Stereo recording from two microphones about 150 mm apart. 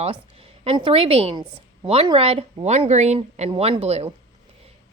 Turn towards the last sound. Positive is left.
turn(degrees=-45)  # may be behind; listen again after turning